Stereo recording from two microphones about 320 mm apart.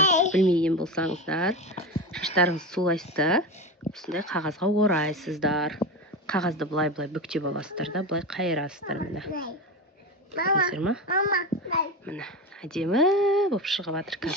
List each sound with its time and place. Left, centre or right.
0.0 s a sound: left
0.5 s speech: centre
10.3 s speech: left
10.7 s speech: centre
11.1 s speech: left
12.0 s speech: centre